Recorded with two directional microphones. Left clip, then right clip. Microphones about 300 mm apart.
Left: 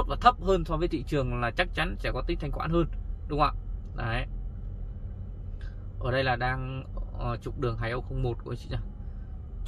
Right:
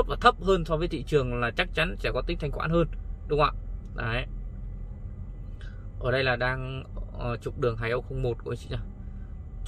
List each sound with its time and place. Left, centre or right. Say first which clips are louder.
0.1 s speech: left 2 dB; centre
6.0 s speech: right 2 dB; centre